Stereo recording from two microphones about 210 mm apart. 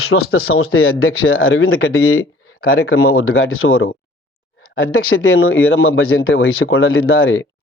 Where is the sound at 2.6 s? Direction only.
45° left (ahead or behind).